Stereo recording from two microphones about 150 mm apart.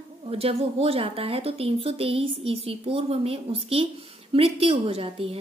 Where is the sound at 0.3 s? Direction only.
40° right (ahead or behind).